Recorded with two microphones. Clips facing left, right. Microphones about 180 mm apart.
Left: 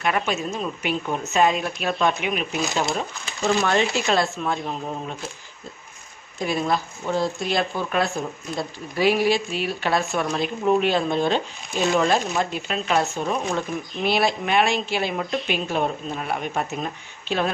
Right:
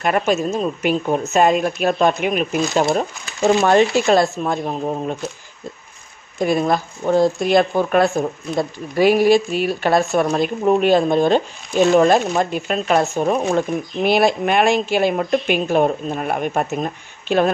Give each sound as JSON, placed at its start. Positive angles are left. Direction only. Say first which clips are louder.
{"t": 0.0, "sound": "speech", "louder": "right 6 dB", "side_deg": -45}
{"t": 6.4, "sound": "speech", "louder": "right 6 dB", "side_deg": -50}